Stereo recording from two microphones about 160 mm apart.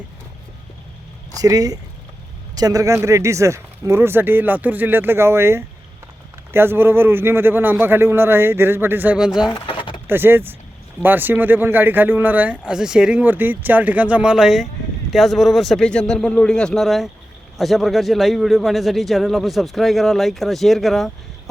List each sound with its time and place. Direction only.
1.4 s speech: 20° right (ahead or behind); by 9.5 s 5° right (ahead or behind)
9.6 s pigeon: 35° left (ahead or behind)
10.1 s a man's voice: 15° right (ahead or behind)